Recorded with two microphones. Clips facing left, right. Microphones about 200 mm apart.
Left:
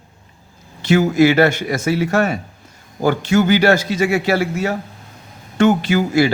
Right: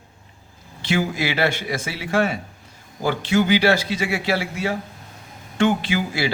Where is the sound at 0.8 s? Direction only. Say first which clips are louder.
Left 10 dB; 45° left (ahead or behind).